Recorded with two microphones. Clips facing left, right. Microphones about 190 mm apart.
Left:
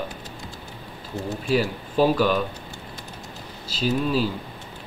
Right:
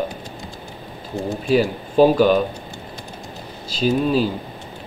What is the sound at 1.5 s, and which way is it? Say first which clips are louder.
Speech: right 5 dB; 20° right (ahead or behind).